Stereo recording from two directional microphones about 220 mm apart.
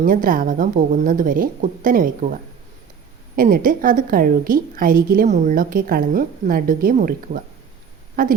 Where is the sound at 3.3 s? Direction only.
40° right (ahead or behind).